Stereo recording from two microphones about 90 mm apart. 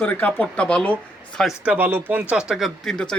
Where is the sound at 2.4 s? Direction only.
5° right (ahead or behind).